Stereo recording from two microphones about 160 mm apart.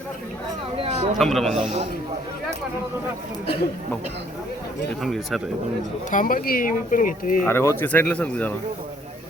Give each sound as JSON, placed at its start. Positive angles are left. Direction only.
{"t": 1.2, "sound": "a man's voice", "side_deg": 0}
{"t": 5.0, "sound": "a man's voice", "side_deg": 0}
{"t": 6.1, "sound": "speech", "side_deg": 55}
{"t": 7.4, "sound": "speech", "side_deg": 15}